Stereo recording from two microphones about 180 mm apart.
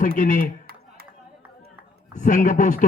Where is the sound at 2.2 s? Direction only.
45° left (ahead or behind).